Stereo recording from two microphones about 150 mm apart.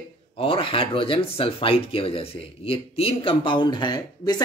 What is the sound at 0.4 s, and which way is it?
Speech, 35° left (ahead or behind).